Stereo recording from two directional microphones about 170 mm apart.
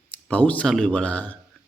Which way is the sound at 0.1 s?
10° left (ahead or behind).